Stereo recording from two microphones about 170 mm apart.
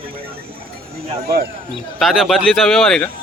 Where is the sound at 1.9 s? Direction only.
Centre (ahead or behind).